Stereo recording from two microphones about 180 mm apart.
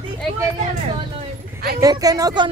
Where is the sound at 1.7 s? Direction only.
20° right (ahead or behind).